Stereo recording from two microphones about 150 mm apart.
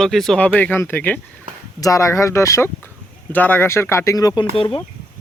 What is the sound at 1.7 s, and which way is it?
Speech, 20° left (ahead or behind).